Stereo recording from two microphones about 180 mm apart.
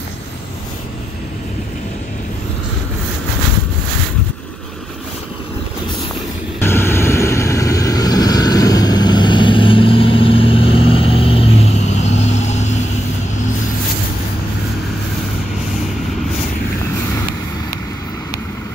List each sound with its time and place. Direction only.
6.6 s vehicle: 10° left (ahead or behind); by 12.7 s 40° left (ahead or behind)